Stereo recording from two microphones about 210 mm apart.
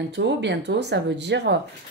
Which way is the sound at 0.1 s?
55° right (ahead or behind).